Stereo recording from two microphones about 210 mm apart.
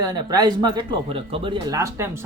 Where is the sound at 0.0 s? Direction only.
20° right (ahead or behind).